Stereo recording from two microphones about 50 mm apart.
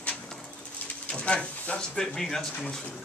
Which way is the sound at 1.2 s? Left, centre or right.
Left.